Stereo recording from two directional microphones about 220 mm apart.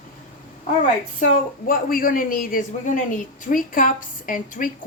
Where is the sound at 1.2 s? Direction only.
40° left (ahead or behind).